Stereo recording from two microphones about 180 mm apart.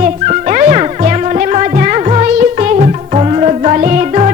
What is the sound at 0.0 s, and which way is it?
Music, 45° right (ahead or behind).